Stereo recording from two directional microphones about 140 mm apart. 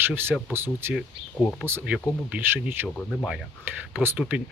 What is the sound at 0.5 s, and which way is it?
Speech, 15° right (ahead or behind).